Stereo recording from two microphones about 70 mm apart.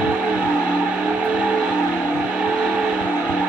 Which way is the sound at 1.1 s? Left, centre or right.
Centre.